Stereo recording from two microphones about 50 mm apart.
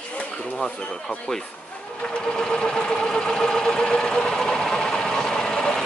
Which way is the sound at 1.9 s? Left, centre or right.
Left.